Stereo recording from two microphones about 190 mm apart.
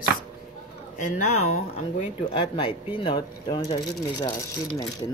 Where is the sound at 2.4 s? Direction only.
25° left (ahead or behind).